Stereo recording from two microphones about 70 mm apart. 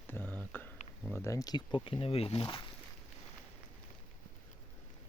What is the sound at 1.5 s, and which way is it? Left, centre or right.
Speech, left.